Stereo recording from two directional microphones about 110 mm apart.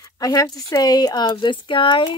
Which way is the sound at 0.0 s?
30° left (ahead or behind).